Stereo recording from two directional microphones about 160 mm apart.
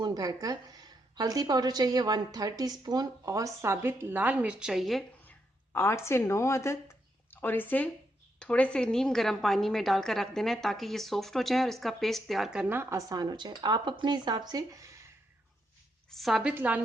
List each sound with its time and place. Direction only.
0.0 s a woman's voice: 25° right (ahead or behind); by 5.0 s centre (ahead or behind)
5.7 s a woman's voice: 15° left (ahead or behind); by 15.0 s 20° right (ahead or behind)
16.0 s a woman's voice: centre (ahead or behind)